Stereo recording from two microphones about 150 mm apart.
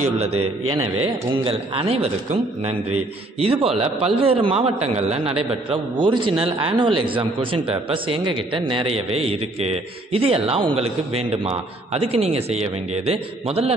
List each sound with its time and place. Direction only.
0.2 s a man's voice: 40° right (ahead or behind)
3.3 s a man's voice: 40° right (ahead or behind)